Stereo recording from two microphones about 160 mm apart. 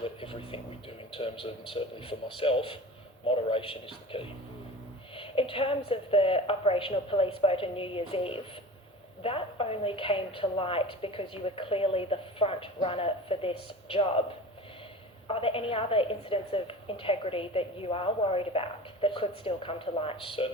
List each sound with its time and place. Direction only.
0.0 s a woman's voice: 35° left (ahead or behind)
15.3 s a woman's voice: 35° left (ahead or behind)